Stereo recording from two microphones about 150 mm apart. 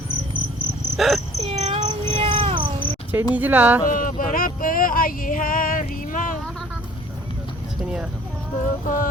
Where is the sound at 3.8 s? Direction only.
65° left (ahead or behind).